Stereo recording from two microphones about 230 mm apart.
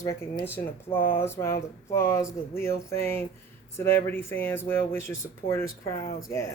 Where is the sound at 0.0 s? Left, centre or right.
Centre.